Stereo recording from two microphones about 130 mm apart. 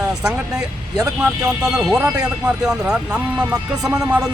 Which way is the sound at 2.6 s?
5° right (ahead or behind).